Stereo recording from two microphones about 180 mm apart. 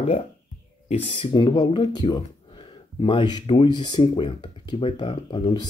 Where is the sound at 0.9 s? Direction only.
35° left (ahead or behind).